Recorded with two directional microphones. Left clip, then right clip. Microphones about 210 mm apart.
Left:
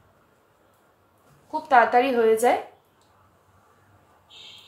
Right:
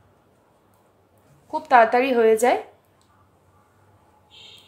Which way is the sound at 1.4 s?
40° right (ahead or behind).